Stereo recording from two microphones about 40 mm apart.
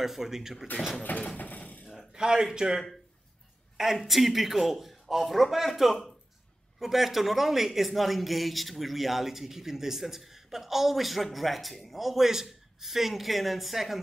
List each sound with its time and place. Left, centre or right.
0.0 s speech: centre
1.3 s a sound: left
2.1 s a woman's voice: centre